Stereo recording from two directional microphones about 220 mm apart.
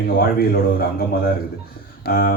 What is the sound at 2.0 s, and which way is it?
Speech, 40° left (ahead or behind).